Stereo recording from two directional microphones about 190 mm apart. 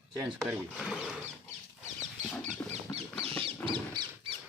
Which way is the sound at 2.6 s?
35° right (ahead or behind).